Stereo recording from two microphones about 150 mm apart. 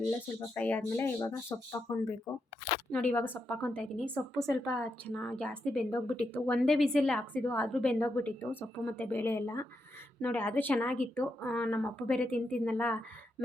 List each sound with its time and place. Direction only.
0.1 s a woman's voice: 10° left (ahead or behind)